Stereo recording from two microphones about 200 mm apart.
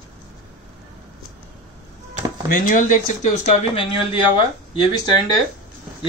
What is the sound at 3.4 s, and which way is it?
Speech, 25° left (ahead or behind).